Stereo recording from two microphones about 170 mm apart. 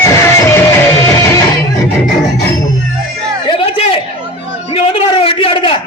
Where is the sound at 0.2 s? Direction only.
15° left (ahead or behind).